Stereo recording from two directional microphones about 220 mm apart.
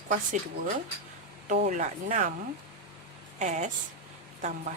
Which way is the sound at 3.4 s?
30° right (ahead or behind).